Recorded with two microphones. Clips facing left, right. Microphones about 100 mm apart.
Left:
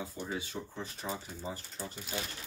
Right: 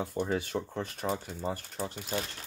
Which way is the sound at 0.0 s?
60° right (ahead or behind).